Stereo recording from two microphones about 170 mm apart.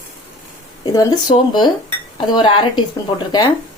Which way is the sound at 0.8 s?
25° left (ahead or behind).